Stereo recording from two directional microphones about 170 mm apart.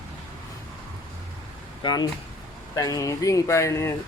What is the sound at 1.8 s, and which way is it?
Speech, 25° left (ahead or behind).